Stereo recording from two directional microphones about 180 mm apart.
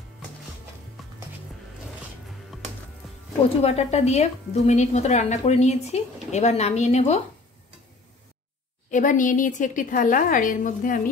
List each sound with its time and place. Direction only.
1.0 s music: centre (ahead or behind)
3.4 s a woman's voice: 35° left (ahead or behind)
8.9 s a woman's voice: 45° left (ahead or behind)